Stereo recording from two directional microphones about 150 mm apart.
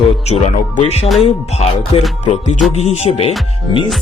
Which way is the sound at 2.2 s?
55° left (ahead or behind).